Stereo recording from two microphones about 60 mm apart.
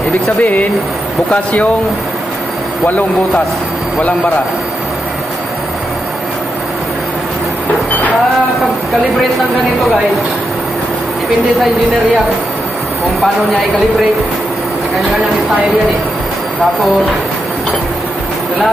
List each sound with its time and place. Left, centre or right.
0.4 s speech: left